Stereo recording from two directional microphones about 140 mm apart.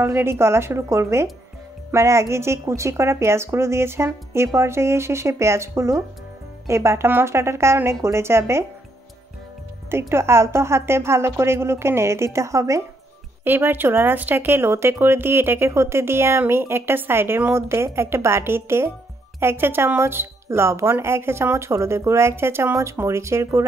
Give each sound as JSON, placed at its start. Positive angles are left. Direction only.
{"t": 0.0, "sound": "speech", "side_deg": -15}
{"t": 9.8, "sound": "speech", "side_deg": -20}